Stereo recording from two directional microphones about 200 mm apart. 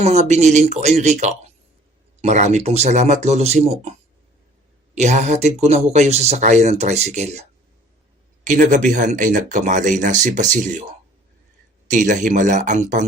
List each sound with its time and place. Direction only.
0.0 s speech: 35° right (ahead or behind)
4.9 s speech: 35° right (ahead or behind)
8.4 s speech: 40° right (ahead or behind)
11.9 s speech: 40° right (ahead or behind)